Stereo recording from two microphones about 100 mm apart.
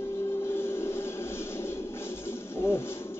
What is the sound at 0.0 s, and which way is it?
Music, 25° left (ahead or behind).